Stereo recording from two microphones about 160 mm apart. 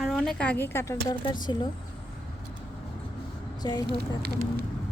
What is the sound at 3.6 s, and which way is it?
Speech, 25° left (ahead or behind).